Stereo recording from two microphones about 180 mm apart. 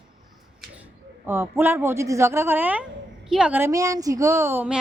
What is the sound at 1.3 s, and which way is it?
Speech, 10° right (ahead or behind).